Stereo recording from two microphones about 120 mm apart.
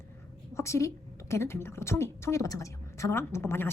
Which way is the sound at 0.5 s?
25° left (ahead or behind).